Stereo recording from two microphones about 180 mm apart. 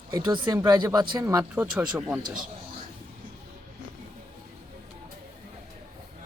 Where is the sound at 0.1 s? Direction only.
25° right (ahead or behind); by 2.2 s 5° right (ahead or behind).